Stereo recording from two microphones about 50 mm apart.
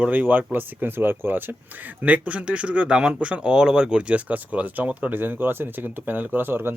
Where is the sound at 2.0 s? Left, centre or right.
Right.